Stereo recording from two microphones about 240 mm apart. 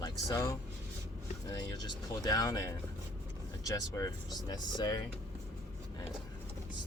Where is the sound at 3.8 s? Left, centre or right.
Centre.